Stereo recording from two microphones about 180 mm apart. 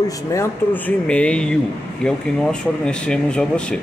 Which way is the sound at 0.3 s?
15° left (ahead or behind).